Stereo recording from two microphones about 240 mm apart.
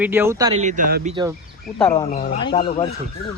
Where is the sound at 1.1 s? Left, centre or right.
Centre.